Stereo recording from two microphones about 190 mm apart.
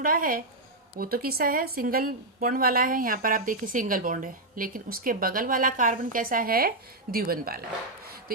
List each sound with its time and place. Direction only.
0.0 s a woman's voice: 50° right (ahead or behind)